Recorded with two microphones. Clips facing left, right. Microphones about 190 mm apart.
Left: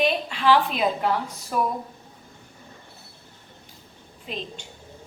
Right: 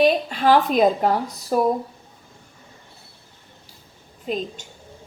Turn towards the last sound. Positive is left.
turn(degrees=-45)  # may be behind; listen again after turning